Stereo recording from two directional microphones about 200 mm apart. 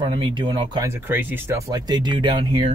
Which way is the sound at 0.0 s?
25° right (ahead or behind).